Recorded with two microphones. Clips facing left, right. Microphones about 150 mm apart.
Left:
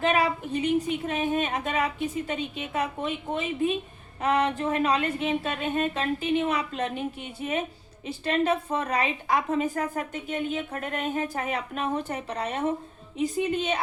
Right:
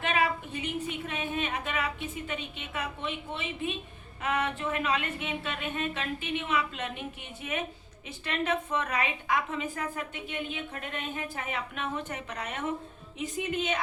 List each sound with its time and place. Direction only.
0.0 s a woman's voice: 35° left (ahead or behind)
8.0 s a woman's voice: 35° left (ahead or behind)